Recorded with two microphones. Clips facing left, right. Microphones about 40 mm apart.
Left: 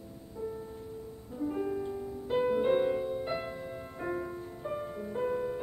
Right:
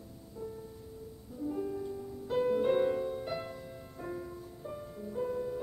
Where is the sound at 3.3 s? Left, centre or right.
Left.